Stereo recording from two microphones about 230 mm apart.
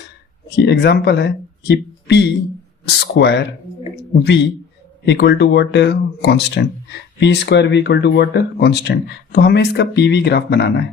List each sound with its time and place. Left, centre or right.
0.5 s speech: left
5.0 s speech: left